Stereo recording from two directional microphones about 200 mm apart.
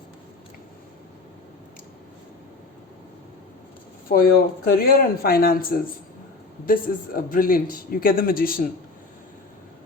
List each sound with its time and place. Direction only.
4.1 s a man's voice: 45° left (ahead or behind)